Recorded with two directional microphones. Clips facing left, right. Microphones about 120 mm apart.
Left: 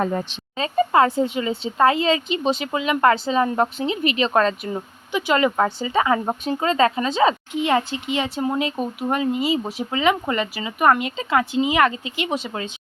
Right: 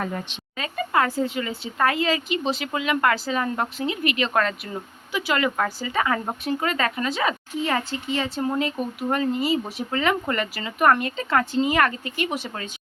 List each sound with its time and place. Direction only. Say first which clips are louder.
0.0 s speech: left 6 dB; 30° left (ahead or behind)